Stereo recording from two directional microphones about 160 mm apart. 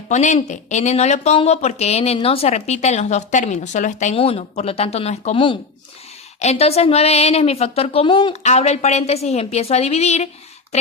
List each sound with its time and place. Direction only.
0.1 s speech: 50° left (ahead or behind)